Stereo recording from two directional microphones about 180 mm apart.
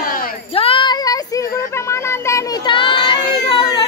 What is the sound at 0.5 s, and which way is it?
Child singing, 30° left (ahead or behind).